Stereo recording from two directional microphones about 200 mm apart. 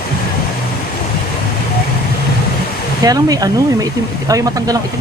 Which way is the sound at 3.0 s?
20° right (ahead or behind).